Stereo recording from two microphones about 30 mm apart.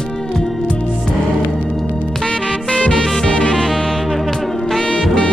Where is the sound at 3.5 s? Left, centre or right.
Centre.